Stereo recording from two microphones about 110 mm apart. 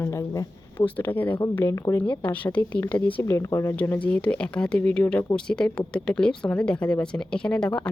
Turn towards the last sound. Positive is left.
turn(degrees=10)  # may be behind; listen again after turning